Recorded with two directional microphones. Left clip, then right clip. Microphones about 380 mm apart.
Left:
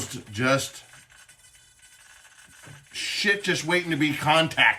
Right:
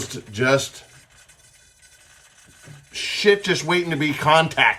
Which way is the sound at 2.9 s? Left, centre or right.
Centre.